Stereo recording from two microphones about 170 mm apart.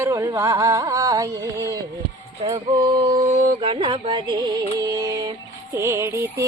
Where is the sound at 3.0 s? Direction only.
25° right (ahead or behind).